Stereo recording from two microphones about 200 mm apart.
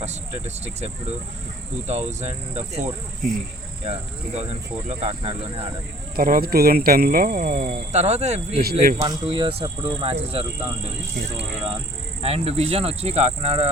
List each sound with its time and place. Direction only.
0.0 s speech: 35° right (ahead or behind)
1.9 s speech: 35° right (ahead or behind)
4.4 s speech: 30° right (ahead or behind)
6.1 s speech: 45° right (ahead or behind)
7.7 s speech: 30° right (ahead or behind)
9.0 s speech: 20° right (ahead or behind)
12.2 s speech: 30° right (ahead or behind)